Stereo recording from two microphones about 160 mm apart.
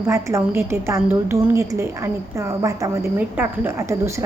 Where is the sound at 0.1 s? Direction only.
15° right (ahead or behind).